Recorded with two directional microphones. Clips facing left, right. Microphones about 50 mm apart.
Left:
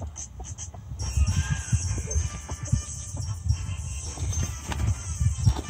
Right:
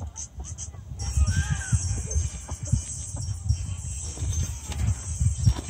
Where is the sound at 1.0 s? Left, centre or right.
Left.